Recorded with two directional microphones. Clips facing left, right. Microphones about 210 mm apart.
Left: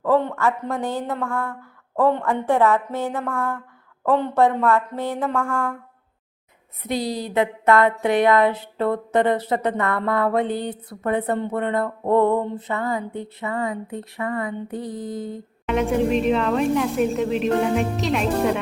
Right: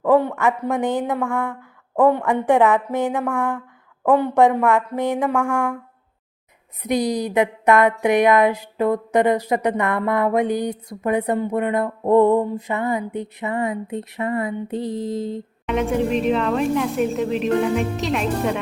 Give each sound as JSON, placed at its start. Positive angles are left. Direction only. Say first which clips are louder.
{"t": 0.0, "sound": "speech", "louder": "right 3 dB", "side_deg": -15}
{"t": 6.8, "sound": "speech", "louder": "right 4 dB", "side_deg": -15}
{"t": 15.6, "sound": "a woman's voice", "louder": "even", "side_deg": 0}